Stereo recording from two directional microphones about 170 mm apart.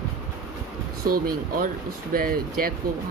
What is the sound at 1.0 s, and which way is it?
Speech, 60° right (ahead or behind).